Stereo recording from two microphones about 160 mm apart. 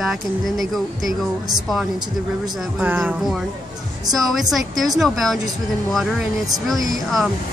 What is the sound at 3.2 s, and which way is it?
Speech, centre (ahead or behind).